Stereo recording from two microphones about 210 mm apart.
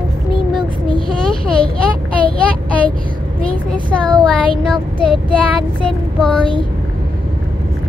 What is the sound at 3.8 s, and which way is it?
Speech, 20° right (ahead or behind).